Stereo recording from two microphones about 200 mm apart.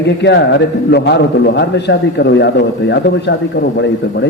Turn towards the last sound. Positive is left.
turn(degrees=60)  # may be behind; listen again after turning